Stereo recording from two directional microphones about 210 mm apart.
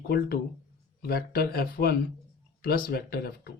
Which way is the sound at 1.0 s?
45° left (ahead or behind).